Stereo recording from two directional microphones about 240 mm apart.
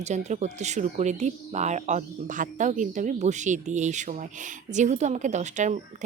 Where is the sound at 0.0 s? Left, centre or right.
Right.